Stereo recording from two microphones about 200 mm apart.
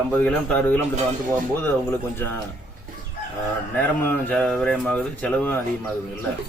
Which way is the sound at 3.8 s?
5° left (ahead or behind).